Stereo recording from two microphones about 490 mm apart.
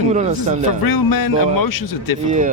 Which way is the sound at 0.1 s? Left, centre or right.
Centre.